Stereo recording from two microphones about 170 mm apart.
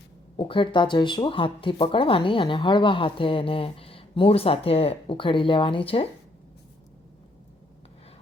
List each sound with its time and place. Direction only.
0.3 s speech: 30° left (ahead or behind)